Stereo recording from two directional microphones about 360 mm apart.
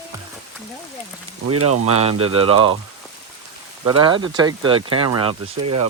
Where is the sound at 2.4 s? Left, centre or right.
Centre.